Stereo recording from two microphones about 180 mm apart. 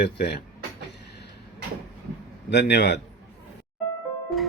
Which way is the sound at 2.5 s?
70° left (ahead or behind).